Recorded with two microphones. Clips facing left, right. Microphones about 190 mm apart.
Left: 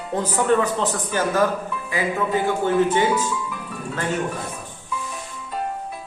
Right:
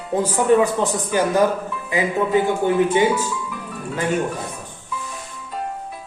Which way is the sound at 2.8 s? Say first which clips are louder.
Right 2 dB; 10° right (ahead or behind).